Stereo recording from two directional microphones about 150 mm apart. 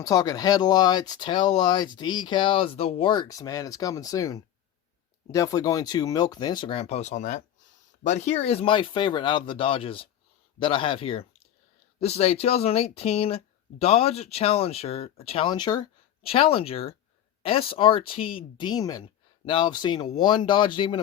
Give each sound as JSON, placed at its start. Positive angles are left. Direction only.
{"t": 0.0, "sound": "speech", "side_deg": 25}